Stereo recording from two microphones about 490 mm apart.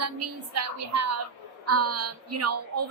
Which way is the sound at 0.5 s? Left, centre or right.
Right.